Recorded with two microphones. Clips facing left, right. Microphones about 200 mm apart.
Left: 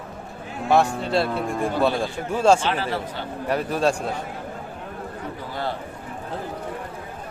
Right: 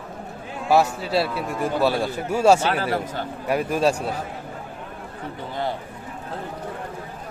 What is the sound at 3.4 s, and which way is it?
Speech, 10° right (ahead or behind).